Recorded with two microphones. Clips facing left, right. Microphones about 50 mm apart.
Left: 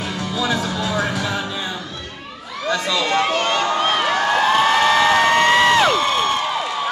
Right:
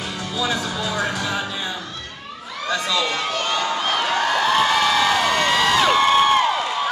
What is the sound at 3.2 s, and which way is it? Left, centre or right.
Speech, left.